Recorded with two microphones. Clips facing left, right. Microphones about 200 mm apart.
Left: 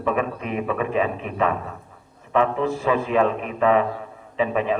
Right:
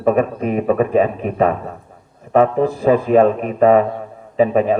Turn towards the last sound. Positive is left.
turn(degrees=-40)  # may be behind; listen again after turning